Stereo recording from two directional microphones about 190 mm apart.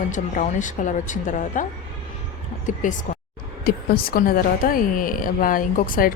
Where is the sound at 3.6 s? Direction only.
50° left (ahead or behind).